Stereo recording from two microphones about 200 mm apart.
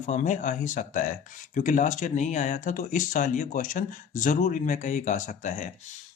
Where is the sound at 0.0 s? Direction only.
35° left (ahead or behind).